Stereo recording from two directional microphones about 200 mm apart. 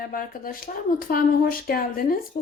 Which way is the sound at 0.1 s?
45° left (ahead or behind).